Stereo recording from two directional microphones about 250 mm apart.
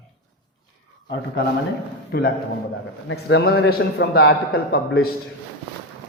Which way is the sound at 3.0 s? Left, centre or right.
Left.